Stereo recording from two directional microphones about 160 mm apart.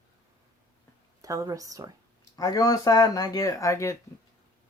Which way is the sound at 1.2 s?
20° right (ahead or behind).